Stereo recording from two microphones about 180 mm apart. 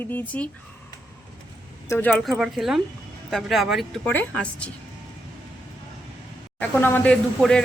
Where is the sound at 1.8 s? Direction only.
10° left (ahead or behind).